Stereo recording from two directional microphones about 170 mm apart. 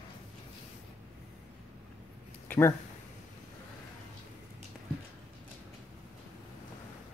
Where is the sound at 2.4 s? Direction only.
10° left (ahead or behind).